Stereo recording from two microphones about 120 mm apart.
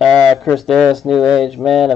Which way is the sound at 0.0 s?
5° left (ahead or behind).